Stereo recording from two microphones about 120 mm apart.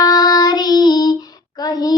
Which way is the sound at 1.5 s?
35° left (ahead or behind).